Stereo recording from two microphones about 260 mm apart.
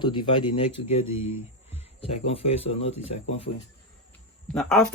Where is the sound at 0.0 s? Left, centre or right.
Centre.